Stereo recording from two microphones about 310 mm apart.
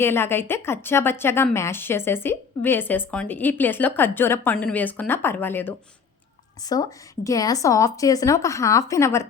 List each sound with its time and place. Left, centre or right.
0.0 s a woman's voice: centre